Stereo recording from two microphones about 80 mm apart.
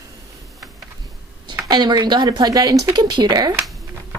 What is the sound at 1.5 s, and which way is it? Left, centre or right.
Speech, right.